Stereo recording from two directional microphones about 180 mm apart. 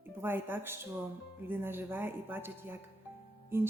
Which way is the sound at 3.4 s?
15° right (ahead or behind).